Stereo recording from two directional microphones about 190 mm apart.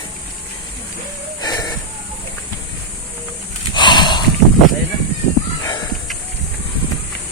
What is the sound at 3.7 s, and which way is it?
Snort, 25° left (ahead or behind).